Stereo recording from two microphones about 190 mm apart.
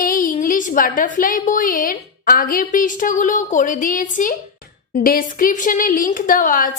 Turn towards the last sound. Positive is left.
turn(degrees=45)  # may be behind; listen again after turning